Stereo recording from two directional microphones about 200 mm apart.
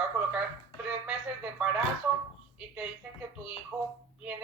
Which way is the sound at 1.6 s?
5° right (ahead or behind).